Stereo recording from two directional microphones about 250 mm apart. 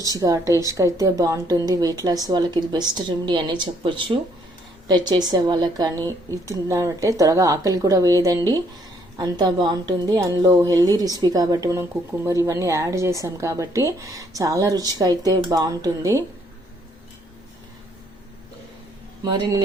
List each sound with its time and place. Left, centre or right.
0.2 s a woman's voice: centre
19.2 s a woman's voice: centre